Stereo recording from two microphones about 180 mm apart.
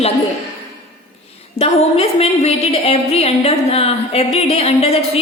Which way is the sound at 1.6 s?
35° left (ahead or behind).